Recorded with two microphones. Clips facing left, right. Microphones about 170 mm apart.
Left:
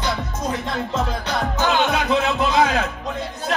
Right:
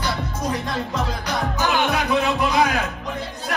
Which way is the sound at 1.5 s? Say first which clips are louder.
Left 2 dB; 20° left (ahead or behind).